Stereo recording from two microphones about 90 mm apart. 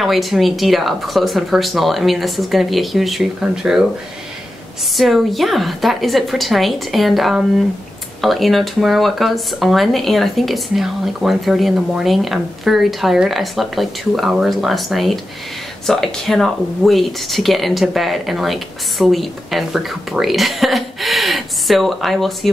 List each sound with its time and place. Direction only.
0.0 s speech: centre (ahead or behind)
4.9 s speech: centre (ahead or behind)